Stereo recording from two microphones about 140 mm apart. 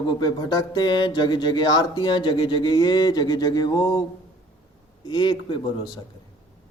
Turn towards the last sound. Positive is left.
turn(degrees=35)  # may be behind; listen again after turning